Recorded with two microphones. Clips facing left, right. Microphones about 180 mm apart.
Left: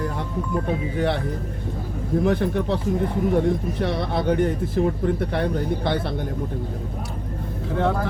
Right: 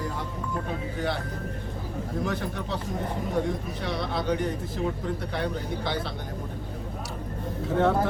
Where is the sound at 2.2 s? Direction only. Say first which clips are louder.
Left 12 dB; 60° left (ahead or behind).